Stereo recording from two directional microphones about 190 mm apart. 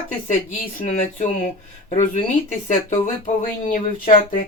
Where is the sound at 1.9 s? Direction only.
40° left (ahead or behind).